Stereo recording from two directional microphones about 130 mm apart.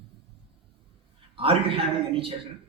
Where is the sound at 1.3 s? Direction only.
45° right (ahead or behind).